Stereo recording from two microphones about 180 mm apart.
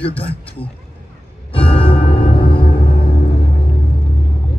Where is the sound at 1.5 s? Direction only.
30° left (ahead or behind).